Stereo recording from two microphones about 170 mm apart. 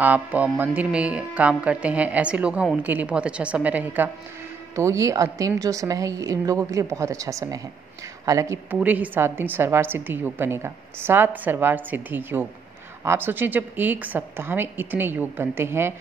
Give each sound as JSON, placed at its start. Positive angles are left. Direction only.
{"t": 0.0, "sound": "a woman's voice", "side_deg": -10}